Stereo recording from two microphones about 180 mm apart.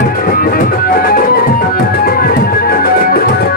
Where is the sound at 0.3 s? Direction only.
55° left (ahead or behind).